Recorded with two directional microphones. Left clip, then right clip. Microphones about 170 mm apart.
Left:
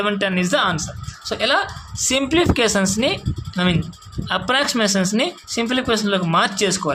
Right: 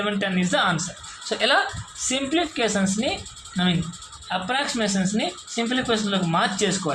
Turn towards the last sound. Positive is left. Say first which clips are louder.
# left 4 dB
turn(degrees=40)  # may be behind; listen again after turning